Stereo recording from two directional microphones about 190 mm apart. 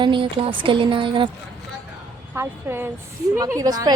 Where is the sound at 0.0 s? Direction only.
25° right (ahead or behind).